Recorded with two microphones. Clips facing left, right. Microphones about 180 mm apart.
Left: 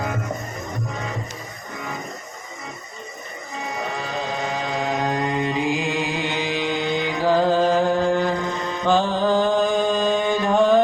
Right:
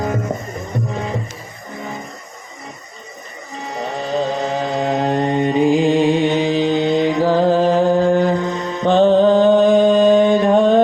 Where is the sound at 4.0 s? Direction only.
35° right (ahead or behind).